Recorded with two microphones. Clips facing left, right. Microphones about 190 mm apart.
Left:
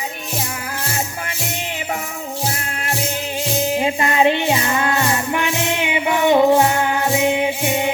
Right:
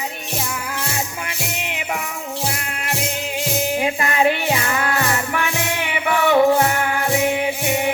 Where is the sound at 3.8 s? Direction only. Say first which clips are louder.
Left 2 dB; 25° left (ahead or behind).